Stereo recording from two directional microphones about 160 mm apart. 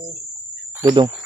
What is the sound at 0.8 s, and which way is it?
Speech, 20° right (ahead or behind).